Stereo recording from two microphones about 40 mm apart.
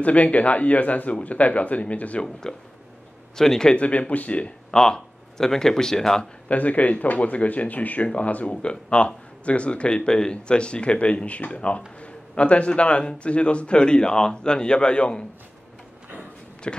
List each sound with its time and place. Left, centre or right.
0.0 s speech: left
2.5 s a man's voice: centre
3.7 s speech: left
4.6 s speech: centre
6.5 s a man's voice: left
16.6 s a man's voice: left